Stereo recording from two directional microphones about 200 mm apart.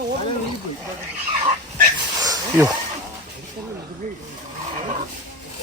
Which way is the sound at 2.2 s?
20° right (ahead or behind).